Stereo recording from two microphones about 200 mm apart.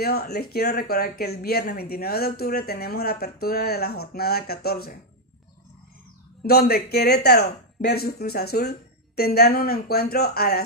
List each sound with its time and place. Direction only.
0.0 s speech: 50° left (ahead or behind)
6.4 s speech: 50° left (ahead or behind)